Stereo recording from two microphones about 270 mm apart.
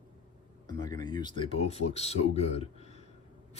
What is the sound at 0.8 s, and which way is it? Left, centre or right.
Speech, centre.